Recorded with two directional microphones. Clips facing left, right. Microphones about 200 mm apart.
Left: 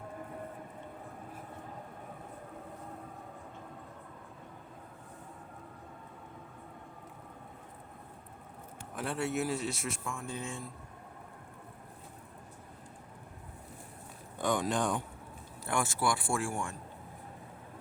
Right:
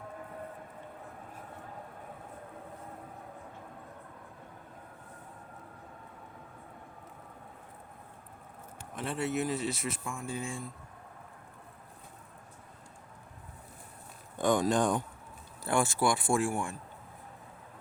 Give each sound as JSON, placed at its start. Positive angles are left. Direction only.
{"t": 9.0, "sound": "speech", "side_deg": 0}
{"t": 14.4, "sound": "speech", "side_deg": -45}
{"t": 15.6, "sound": "speech", "side_deg": -30}